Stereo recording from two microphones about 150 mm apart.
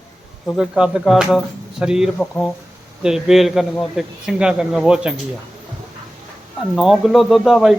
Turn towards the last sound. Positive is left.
turn(degrees=-5)  # may be behind; listen again after turning